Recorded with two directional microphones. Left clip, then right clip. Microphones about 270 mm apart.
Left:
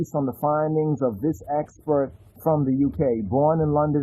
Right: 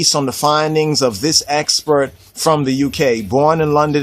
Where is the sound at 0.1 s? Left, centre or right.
Right.